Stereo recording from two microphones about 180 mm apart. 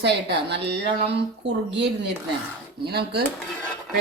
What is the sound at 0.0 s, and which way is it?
Speech, 70° right (ahead or behind).